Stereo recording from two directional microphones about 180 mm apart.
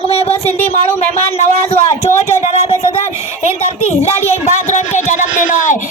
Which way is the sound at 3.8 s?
35° left (ahead or behind).